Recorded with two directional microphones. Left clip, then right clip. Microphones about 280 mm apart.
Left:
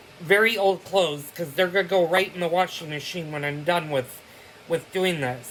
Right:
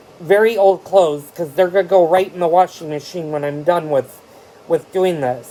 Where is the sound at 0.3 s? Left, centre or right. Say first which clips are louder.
Right 6 dB; centre.